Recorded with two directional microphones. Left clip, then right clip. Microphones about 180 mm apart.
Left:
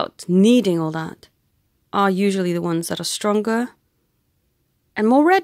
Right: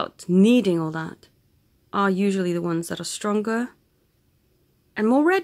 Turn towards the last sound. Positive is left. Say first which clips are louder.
# left 5 dB
turn(degrees=40)  # may be behind; listen again after turning